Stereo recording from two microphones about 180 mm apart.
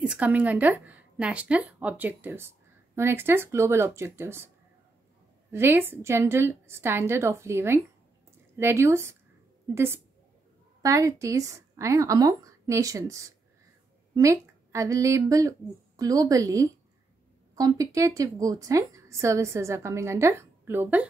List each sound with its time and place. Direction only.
0.0 s a woman's voice: 10° right (ahead or behind)
5.5 s a woman's voice: 10° right (ahead or behind)